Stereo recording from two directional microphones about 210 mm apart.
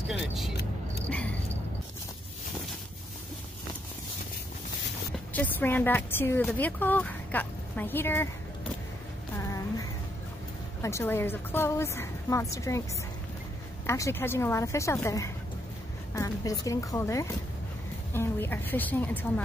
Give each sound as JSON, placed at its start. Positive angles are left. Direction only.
{"t": 0.1, "sound": "speech", "side_deg": 0}
{"t": 5.3, "sound": "a woman's voice", "side_deg": 10}
{"t": 10.8, "sound": "a woman's voice", "side_deg": 15}
{"t": 13.8, "sound": "a woman's voice", "side_deg": 15}
{"t": 16.1, "sound": "a sound", "side_deg": 15}
{"t": 16.6, "sound": "a woman's voice", "side_deg": 15}